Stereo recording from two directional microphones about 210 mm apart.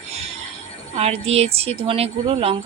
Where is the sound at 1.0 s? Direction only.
30° right (ahead or behind).